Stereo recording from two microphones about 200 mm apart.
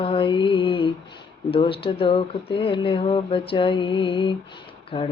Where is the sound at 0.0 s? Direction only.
25° left (ahead or behind).